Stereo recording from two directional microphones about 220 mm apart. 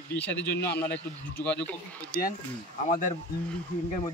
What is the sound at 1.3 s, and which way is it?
Speech, 5° left (ahead or behind).